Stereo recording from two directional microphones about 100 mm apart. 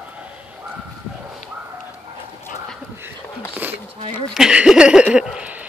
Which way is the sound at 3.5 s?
20° right (ahead or behind).